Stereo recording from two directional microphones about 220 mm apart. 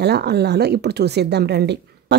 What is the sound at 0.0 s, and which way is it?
A woman's voice, 50° right (ahead or behind).